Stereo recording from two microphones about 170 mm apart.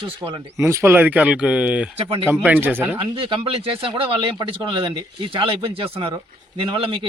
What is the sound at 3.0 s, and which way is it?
Speech, 30° right (ahead or behind).